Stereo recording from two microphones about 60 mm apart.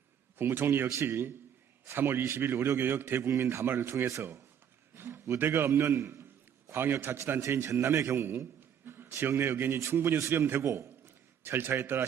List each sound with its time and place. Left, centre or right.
0.3 s a man's voice: right
3.7 s a man's voice: right
4.9 s a sound: right
5.4 s a man's voice: right
5.9 s a man's voice: right
6.7 s a man's voice: right
10.2 s a man's voice: right
10.4 s a man's voice: right
11.0 s a sound: right